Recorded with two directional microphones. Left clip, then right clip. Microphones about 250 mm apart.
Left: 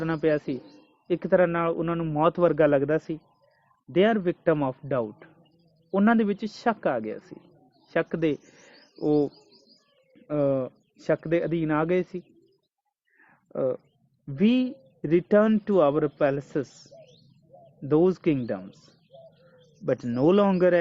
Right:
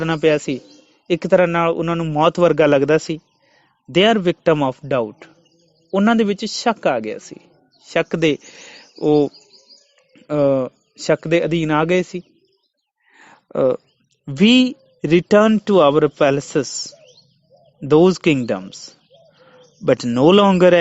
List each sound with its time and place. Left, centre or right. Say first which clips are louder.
0.0 s a man's voice: right 8 dB; right
13.2 s a sound: right 10 dB; right
14.3 s a man's voice: right 11 dB; right